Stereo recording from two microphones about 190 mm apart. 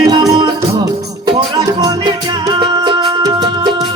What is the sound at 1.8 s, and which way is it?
Music, 20° right (ahead or behind).